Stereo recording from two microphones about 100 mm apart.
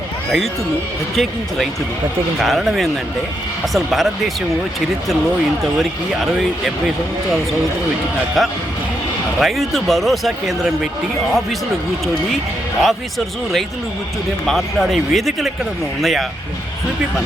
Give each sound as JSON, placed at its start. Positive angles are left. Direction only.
{"t": 1.1, "sound": "speech", "side_deg": 0}
{"t": 8.4, "sound": "speech", "side_deg": 0}
{"t": 12.8, "sound": "speech", "side_deg": 0}